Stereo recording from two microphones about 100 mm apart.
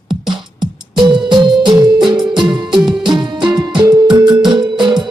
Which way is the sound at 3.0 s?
45° right (ahead or behind).